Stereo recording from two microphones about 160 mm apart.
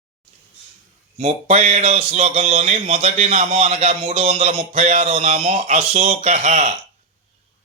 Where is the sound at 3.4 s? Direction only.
50° right (ahead or behind).